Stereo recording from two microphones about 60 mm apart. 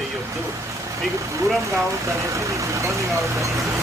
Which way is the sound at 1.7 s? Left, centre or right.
Right.